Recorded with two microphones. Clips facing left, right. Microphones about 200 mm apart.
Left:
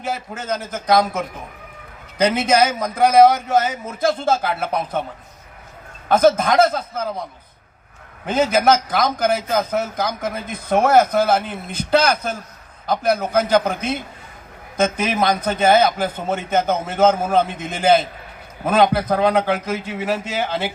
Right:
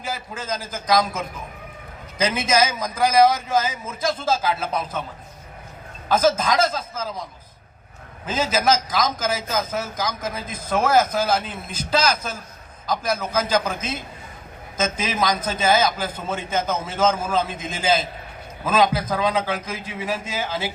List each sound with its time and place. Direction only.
0.0 s a man's voice: 65° left (ahead or behind)
6.1 s a man's voice: 60° left (ahead or behind)
8.3 s a man's voice: 65° left (ahead or behind)